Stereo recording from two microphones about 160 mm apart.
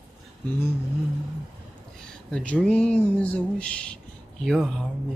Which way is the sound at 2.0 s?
5° left (ahead or behind).